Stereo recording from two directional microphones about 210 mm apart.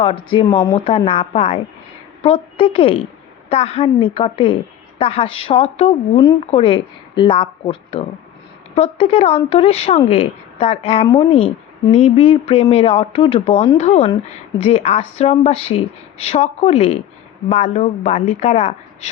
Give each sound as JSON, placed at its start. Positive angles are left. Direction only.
{"t": 0.0, "sound": "a woman's voice", "side_deg": 25}